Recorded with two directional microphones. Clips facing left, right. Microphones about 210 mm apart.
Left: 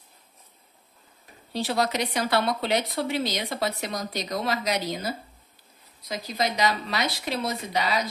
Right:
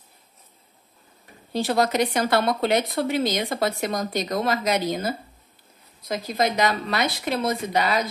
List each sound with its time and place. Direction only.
1.5 s a woman's voice: 50° right (ahead or behind)